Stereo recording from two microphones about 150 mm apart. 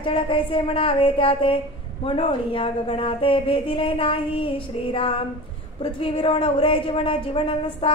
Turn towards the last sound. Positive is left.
turn(degrees=35)  # may be behind; listen again after turning